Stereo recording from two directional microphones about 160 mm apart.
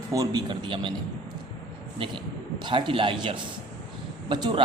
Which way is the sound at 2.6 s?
30° right (ahead or behind).